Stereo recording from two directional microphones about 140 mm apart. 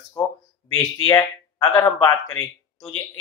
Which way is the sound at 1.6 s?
20° left (ahead or behind).